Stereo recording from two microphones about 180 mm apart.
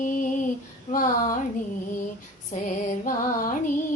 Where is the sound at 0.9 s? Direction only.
50° left (ahead or behind).